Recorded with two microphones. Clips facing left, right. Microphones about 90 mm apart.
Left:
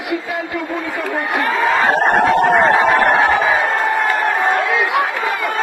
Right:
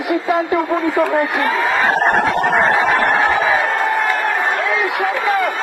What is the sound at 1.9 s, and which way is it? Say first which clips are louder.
Speech: left 2 dB; 45° left (ahead or behind).